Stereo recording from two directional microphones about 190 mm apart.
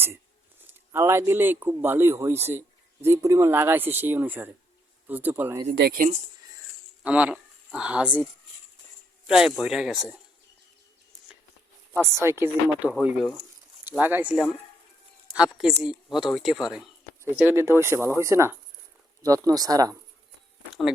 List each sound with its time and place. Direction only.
0.7 s speech: 15° right (ahead or behind)
5.7 s speech: 55° right (ahead or behind)
7.0 s a woman's voice: 5° right (ahead or behind)
11.9 s a woman's voice: 15° right (ahead or behind)